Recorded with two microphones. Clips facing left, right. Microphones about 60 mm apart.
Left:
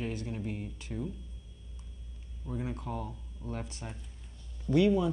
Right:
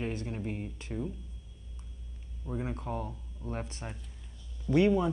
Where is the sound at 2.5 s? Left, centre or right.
Right.